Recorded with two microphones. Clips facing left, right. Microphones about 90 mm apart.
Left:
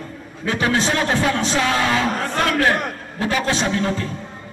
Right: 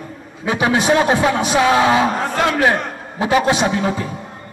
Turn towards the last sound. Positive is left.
turn(degrees=-15)  # may be behind; listen again after turning